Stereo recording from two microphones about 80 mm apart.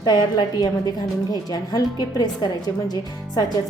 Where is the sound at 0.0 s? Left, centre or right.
Left.